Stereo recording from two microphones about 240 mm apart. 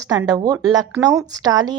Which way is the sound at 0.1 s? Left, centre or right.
Centre.